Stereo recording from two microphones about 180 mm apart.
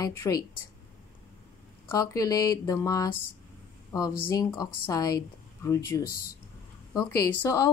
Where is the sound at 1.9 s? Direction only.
20° left (ahead or behind).